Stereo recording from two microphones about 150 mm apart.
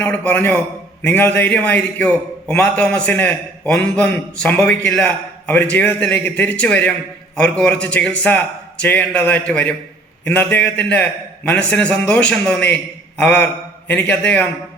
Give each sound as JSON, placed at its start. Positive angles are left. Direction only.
{"t": 0.0, "sound": "a man's voice", "side_deg": 10}